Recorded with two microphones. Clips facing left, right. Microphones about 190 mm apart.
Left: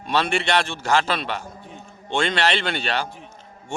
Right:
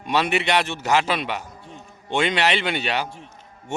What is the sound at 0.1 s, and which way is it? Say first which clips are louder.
A man's voice: right 1 dB; 10° right (ahead or behind).